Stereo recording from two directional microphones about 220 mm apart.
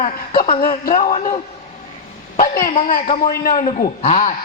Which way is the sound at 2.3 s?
40° left (ahead or behind).